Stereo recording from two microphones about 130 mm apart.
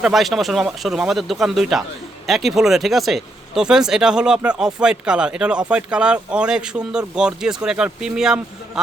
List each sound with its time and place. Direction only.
0.0 s speech: centre (ahead or behind)